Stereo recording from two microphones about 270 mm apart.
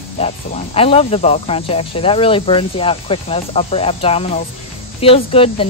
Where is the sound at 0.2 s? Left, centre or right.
Left.